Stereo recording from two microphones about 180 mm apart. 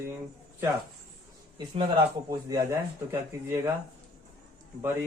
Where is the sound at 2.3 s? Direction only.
20° right (ahead or behind).